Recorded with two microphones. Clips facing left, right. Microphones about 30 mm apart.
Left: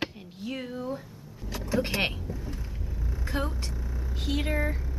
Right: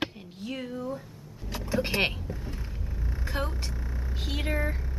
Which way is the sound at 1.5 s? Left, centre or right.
Centre.